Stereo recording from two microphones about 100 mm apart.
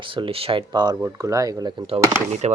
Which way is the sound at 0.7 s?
45° right (ahead or behind).